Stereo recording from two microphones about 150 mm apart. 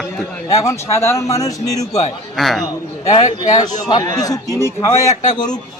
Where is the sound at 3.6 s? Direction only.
25° left (ahead or behind).